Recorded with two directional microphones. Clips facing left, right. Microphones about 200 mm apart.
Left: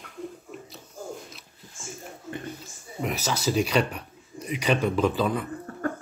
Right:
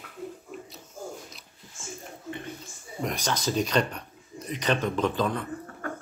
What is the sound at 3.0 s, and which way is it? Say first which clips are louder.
Speech: left 1 dB; 5° left (ahead or behind).